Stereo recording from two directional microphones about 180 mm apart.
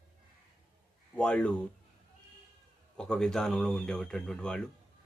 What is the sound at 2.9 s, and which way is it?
Speech, 5° left (ahead or behind).